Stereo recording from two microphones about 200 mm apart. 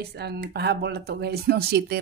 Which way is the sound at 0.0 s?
55° right (ahead or behind).